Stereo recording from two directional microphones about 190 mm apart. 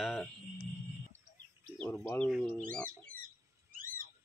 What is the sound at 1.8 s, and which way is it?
Speech, 10° left (ahead or behind).